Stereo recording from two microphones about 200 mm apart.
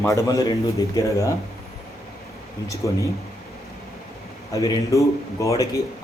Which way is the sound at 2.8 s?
15° left (ahead or behind).